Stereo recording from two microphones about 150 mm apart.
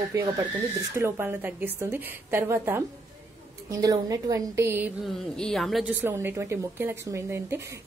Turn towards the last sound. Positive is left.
turn(degrees=-15)  # may be behind; listen again after turning